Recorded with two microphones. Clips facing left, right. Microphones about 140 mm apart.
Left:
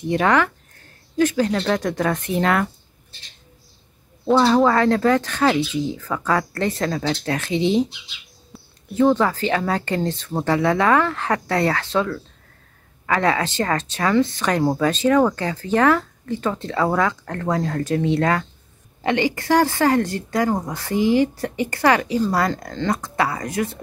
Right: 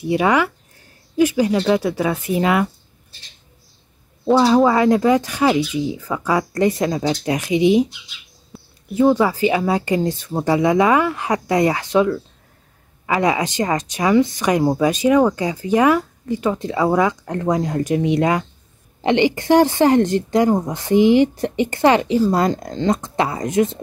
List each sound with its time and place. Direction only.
0.0 s speech: 10° right (ahead or behind)
4.3 s speech: 5° right (ahead or behind)
8.5 s a sound: centre (ahead or behind)
8.9 s a woman's voice: 10° right (ahead or behind)